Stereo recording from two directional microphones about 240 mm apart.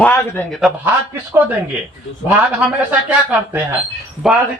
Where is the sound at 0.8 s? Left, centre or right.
Centre.